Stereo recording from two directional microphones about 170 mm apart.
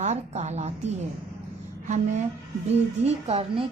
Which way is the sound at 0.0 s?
45° right (ahead or behind).